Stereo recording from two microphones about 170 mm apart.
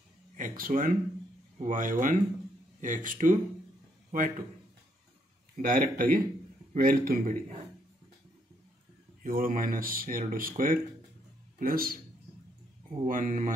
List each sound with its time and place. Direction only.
0.4 s a man's voice: 55° right (ahead or behind)
5.6 s a man's voice: 55° right (ahead or behind)
9.2 s a man's voice: 55° right (ahead or behind)
13.0 s a man's voice: 50° right (ahead or behind)